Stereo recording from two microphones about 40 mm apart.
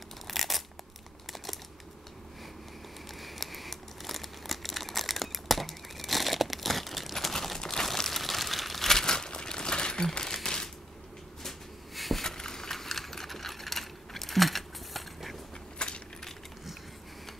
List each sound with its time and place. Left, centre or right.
0.3 s tearing: centre
3.2 s crumpling: centre; by 10.0 s left
10.1 s a sound: centre
11.4 s snort: centre
12.2 s a sound: centre
12.7 s sewing machine: centre
15.8 s keys jangling: left